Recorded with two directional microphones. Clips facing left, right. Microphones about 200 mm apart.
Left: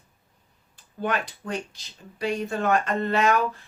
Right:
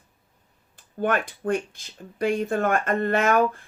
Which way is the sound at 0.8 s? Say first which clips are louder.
Right 3 dB; 50° right (ahead or behind).